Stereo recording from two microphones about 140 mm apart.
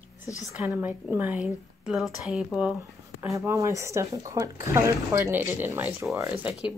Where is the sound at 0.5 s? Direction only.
10° right (ahead or behind).